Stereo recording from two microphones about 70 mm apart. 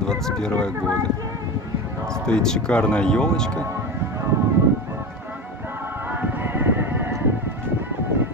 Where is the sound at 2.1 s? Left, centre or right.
Centre.